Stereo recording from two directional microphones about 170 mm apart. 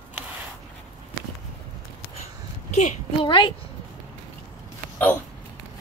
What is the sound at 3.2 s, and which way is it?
Speech, 30° left (ahead or behind).